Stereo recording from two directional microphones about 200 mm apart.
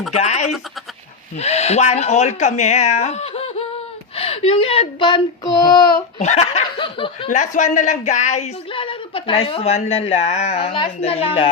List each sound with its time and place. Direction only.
0.1 s a woman's voice: 35° left (ahead or behind)
6.1 s speech: 35° left (ahead or behind)
7.3 s a woman's voice: 40° left (ahead or behind)